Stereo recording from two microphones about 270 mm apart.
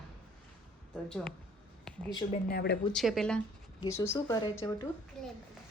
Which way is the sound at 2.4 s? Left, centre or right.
Left.